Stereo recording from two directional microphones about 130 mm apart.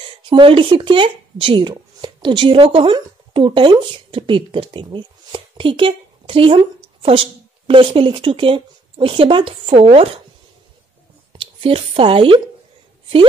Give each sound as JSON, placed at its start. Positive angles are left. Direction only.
{"t": 0.3, "sound": "speech", "side_deg": -40}
{"t": 11.3, "sound": "speech", "side_deg": -45}